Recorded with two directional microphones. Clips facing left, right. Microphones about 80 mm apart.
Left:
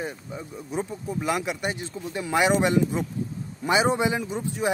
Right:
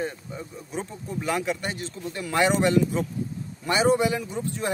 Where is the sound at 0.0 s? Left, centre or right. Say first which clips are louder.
Right 1 dB; centre.